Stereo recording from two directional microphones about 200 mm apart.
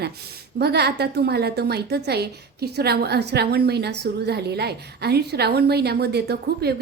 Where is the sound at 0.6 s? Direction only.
55° right (ahead or behind).